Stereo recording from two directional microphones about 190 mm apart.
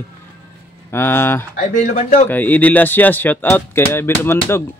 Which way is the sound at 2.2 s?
10° left (ahead or behind).